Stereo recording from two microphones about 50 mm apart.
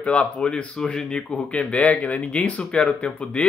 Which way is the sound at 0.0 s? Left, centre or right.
Left.